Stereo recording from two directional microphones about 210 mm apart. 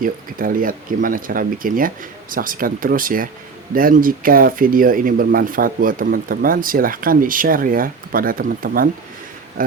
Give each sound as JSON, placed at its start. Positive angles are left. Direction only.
{"t": 0.0, "sound": "speech", "side_deg": -40}